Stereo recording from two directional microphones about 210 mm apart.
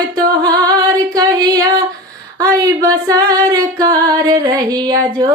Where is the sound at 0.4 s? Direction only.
20° right (ahead or behind).